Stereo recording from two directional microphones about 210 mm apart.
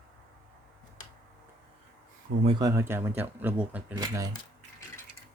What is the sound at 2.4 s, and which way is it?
Speech, 15° right (ahead or behind).